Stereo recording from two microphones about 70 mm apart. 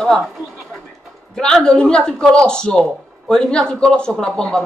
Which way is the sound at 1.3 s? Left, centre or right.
Centre.